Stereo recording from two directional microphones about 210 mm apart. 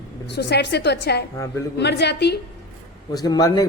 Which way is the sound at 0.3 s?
55° left (ahead or behind).